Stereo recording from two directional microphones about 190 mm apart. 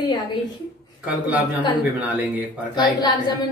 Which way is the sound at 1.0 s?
5° right (ahead or behind).